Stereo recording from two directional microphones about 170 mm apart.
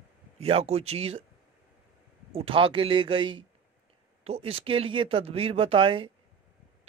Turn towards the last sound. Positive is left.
turn(degrees=-30)  # may be behind; listen again after turning